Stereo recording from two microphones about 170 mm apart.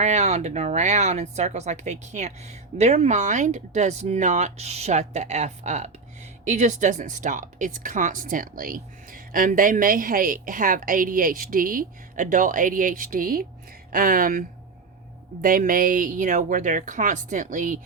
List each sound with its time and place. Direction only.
0.0 s speech: 40° right (ahead or behind)